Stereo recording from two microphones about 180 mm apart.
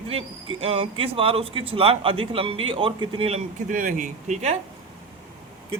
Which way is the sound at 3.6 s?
45° right (ahead or behind).